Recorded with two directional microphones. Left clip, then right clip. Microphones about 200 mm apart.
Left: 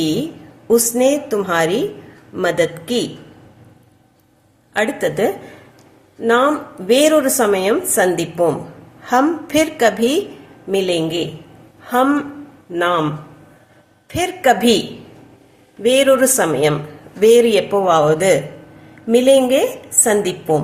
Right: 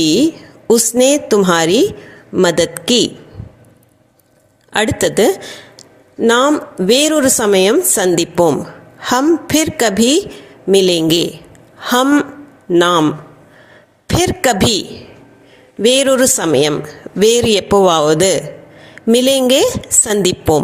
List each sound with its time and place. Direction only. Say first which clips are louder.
0.0 s speech: right 7 dB; 45° right (ahead or behind)
4.8 s a woman's voice: right 4 dB; 45° right (ahead or behind)
14.2 s speech: right 1 dB; 45° right (ahead or behind)
15.8 s speech: right 1 dB; 45° right (ahead or behind)